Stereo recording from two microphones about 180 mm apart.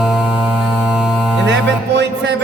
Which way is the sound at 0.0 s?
5° right (ahead or behind).